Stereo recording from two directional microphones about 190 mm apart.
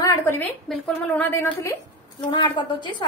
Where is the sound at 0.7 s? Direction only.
5° left (ahead or behind).